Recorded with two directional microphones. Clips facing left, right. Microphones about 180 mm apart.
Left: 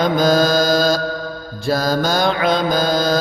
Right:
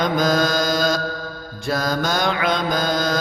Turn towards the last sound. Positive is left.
turn(degrees=30)  # may be behind; listen again after turning